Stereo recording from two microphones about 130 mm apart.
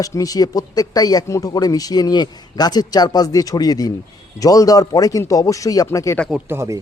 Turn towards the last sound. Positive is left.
turn(degrees=-20)  # may be behind; listen again after turning